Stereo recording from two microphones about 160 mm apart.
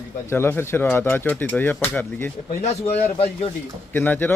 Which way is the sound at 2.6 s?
40° left (ahead or behind).